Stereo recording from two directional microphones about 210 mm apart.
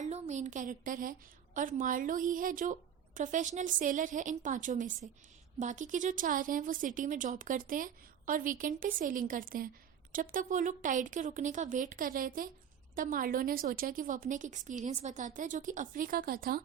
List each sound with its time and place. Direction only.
0.0 s a woman's voice: 35° right (ahead or behind)